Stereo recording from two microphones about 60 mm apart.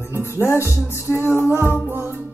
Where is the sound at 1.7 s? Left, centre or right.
Right.